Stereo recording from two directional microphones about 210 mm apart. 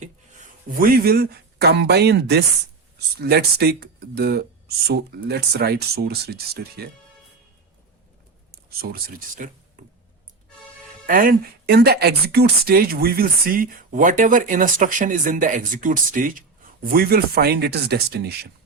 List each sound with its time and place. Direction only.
0.8 s speech: 45° right (ahead or behind)
8.8 s speech: 45° right (ahead or behind)
11.0 s speech: 40° right (ahead or behind)